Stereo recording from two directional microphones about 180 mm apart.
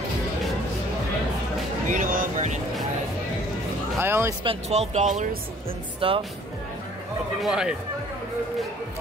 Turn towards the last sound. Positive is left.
turn(degrees=-5)  # may be behind; listen again after turning